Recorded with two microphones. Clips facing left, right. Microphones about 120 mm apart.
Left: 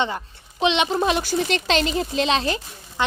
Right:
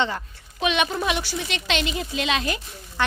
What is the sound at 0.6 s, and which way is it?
Speech, 25° left (ahead or behind).